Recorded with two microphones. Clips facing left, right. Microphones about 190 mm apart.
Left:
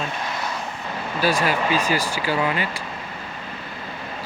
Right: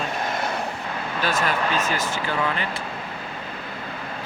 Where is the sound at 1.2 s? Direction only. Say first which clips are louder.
Left 3 dB; 10° left (ahead or behind).